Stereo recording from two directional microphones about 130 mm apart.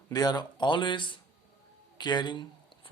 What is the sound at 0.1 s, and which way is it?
Speech, 30° left (ahead or behind).